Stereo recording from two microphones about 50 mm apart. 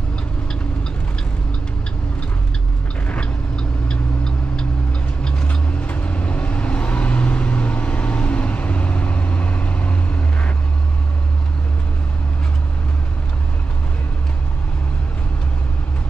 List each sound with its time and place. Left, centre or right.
3.5 s vehicle: centre